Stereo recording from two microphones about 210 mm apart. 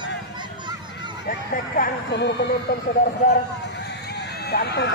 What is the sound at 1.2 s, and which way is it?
Speech, 40° left (ahead or behind).